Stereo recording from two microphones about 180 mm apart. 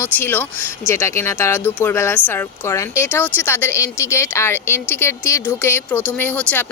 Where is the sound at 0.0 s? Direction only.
10° left (ahead or behind).